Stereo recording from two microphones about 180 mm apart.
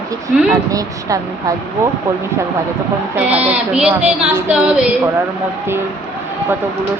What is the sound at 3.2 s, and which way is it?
Speech, 10° right (ahead or behind).